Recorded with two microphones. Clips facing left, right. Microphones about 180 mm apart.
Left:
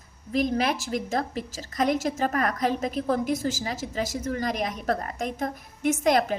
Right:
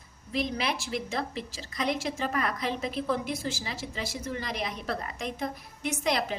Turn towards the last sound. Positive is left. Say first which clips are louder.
# left 7 dB
turn(degrees=45)  # may be behind; listen again after turning